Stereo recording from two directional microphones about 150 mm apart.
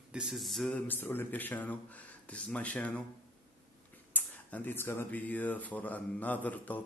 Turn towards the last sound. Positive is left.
turn(degrees=10)  # may be behind; listen again after turning